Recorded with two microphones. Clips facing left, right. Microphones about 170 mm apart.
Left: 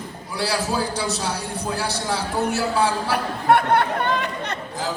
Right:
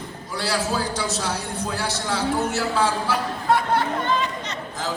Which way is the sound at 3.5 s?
60° left (ahead or behind).